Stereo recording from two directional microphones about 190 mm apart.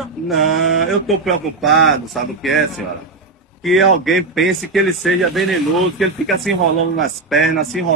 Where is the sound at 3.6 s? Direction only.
Centre (ahead or behind).